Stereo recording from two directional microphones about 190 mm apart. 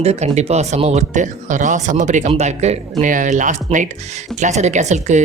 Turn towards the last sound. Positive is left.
turn(degrees=-40)  # may be behind; listen again after turning